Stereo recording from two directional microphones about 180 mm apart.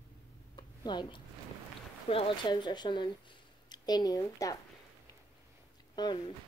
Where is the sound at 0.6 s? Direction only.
25° left (ahead or behind).